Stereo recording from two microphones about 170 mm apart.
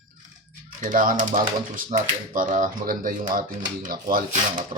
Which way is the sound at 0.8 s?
50° right (ahead or behind).